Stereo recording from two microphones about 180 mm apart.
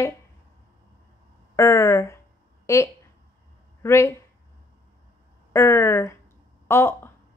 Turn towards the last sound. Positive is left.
turn(degrees=15)  # may be behind; listen again after turning